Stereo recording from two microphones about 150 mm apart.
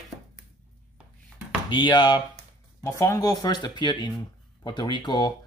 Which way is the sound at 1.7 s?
35° left (ahead or behind).